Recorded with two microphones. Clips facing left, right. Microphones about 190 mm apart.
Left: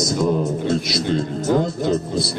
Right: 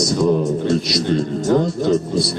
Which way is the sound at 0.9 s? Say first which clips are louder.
Right 2 dB; 25° left (ahead or behind).